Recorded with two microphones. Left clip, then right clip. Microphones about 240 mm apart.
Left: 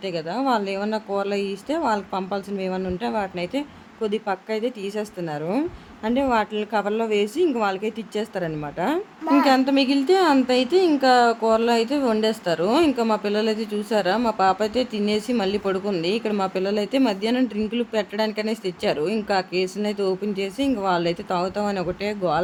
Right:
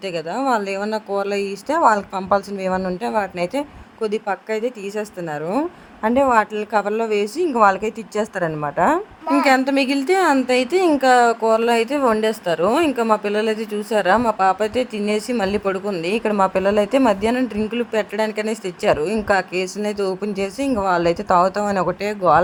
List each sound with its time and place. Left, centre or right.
0.0 s speech: centre